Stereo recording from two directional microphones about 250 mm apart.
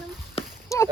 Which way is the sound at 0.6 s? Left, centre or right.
Centre.